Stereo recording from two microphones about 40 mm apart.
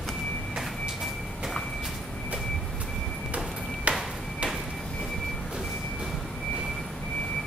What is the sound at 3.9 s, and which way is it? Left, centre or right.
Ping, right.